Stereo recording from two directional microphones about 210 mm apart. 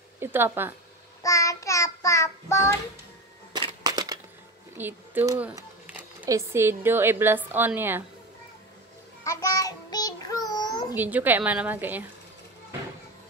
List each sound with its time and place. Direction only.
0.2 s a woman's voice: 10° right (ahead or behind)
1.2 s child singing: 15° left (ahead or behind)
3.5 s a sound: 20° right (ahead or behind)
6.2 s a woman's voice: 15° right (ahead or behind)
9.2 s child singing: 15° left (ahead or behind)
11.0 s a woman's voice: 10° right (ahead or behind)